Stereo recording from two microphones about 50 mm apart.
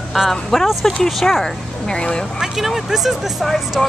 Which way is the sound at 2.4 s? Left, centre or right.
Centre.